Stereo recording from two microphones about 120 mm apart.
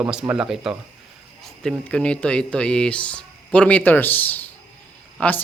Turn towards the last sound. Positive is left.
turn(degrees=10)  # may be behind; listen again after turning